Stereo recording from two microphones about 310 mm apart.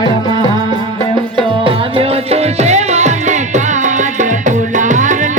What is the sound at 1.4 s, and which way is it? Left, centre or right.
Music, centre.